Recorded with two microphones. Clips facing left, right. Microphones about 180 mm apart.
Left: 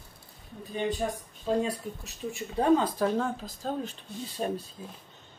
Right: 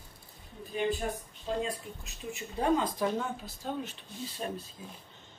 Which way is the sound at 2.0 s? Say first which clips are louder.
Left 3 dB; 35° left (ahead or behind).